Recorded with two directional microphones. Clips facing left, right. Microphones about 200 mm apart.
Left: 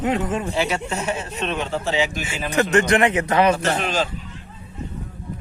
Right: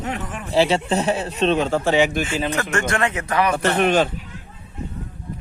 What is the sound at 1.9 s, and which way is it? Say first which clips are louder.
Speech: right 5 dB; 60° right (ahead or behind).